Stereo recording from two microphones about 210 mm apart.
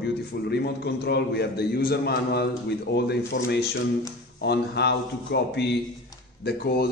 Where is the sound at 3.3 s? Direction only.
40° left (ahead or behind).